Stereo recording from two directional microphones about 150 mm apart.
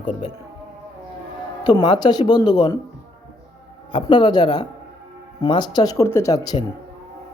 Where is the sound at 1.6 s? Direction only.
30° left (ahead or behind).